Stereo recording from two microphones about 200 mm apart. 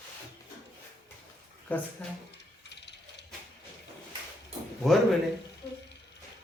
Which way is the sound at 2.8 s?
60° left (ahead or behind).